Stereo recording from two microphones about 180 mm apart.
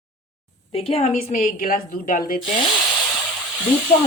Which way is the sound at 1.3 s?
50° left (ahead or behind).